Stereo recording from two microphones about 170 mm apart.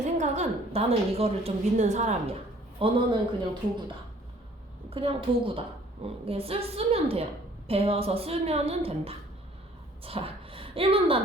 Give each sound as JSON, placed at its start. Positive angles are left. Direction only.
{"t": 0.0, "sound": "a woman's voice", "side_deg": -45}
{"t": 4.9, "sound": "a woman's voice", "side_deg": -30}